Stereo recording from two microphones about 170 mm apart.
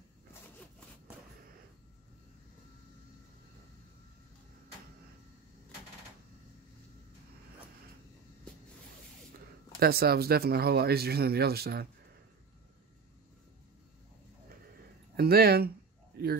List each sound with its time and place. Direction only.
9.8 s speech: 65° right (ahead or behind)
15.1 s speech: 65° right (ahead or behind)
16.2 s a sound: 65° right (ahead or behind)